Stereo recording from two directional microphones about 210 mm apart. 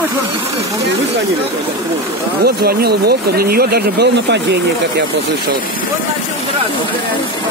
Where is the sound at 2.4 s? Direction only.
50° right (ahead or behind).